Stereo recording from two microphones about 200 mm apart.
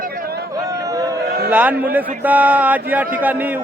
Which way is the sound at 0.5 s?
15° right (ahead or behind).